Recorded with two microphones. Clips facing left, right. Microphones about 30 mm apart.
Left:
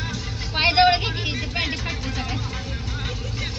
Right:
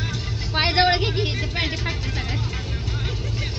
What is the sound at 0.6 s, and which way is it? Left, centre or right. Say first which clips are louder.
Vehicle: left 2 dB; centre.